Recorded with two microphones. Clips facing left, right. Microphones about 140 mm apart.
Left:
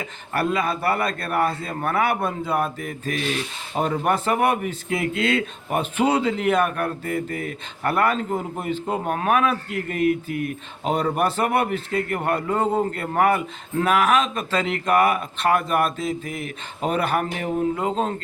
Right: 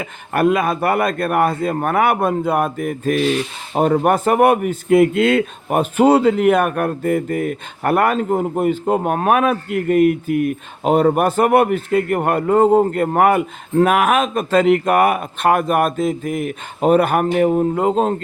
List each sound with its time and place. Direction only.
0.0 s a man's voice: 50° right (ahead or behind)